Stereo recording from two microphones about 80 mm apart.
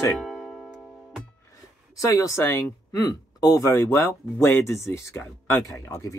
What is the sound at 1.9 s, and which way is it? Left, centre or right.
Speech, left.